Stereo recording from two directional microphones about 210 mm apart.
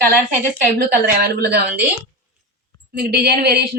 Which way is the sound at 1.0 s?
50° right (ahead or behind).